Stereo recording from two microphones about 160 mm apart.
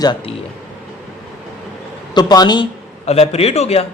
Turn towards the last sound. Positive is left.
turn(degrees=40)  # may be behind; listen again after turning